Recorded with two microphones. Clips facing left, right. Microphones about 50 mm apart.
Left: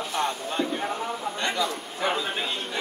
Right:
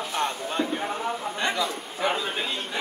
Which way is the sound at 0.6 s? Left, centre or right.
Centre.